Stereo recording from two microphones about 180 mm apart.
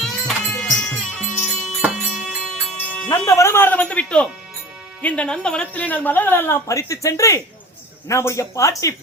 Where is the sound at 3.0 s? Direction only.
15° left (ahead or behind).